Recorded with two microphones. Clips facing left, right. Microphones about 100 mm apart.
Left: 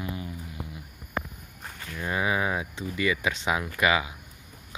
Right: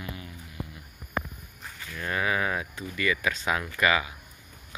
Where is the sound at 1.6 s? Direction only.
20° left (ahead or behind).